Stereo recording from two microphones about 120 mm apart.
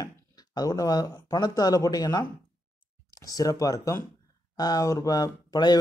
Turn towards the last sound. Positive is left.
turn(degrees=35)  # may be behind; listen again after turning